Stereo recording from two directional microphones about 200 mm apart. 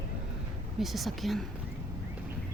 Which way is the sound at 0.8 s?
Centre (ahead or behind).